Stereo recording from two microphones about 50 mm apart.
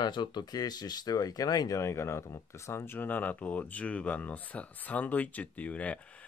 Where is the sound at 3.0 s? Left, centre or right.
Left.